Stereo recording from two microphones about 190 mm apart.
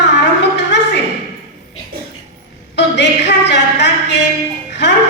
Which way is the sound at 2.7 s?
65° left (ahead or behind).